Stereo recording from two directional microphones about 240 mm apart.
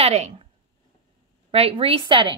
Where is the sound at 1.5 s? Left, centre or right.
Right.